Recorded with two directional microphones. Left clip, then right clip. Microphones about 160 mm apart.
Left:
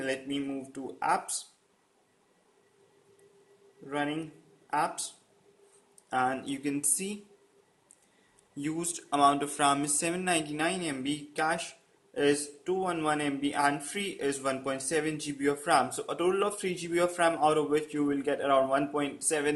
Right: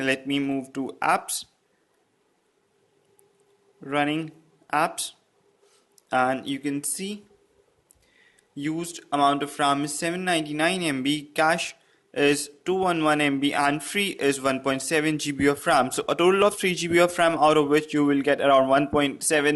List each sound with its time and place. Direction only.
0.0 s speech: 40° right (ahead or behind)
3.8 s speech: 40° right (ahead or behind); by 7.2 s 20° right (ahead or behind)
8.5 s speech: 20° right (ahead or behind); by 19.5 s 35° right (ahead or behind)